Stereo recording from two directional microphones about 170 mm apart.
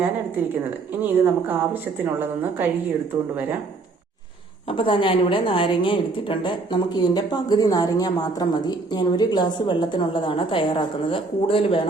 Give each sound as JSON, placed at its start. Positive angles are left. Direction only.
{"t": 1.2, "sound": "speech", "side_deg": -10}
{"t": 4.7, "sound": "a woman's voice", "side_deg": 30}